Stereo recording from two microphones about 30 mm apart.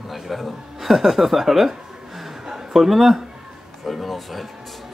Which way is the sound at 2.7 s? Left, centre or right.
Centre.